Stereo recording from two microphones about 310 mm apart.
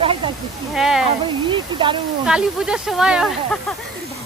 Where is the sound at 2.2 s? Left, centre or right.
Centre.